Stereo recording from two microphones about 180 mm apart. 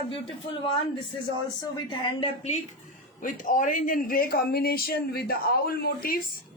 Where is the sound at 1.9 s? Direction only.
30° left (ahead or behind).